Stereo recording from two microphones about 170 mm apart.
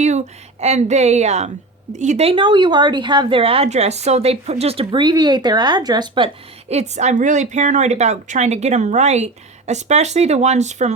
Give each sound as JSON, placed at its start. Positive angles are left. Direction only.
{"t": 0.6, "sound": "a woman's voice", "side_deg": -40}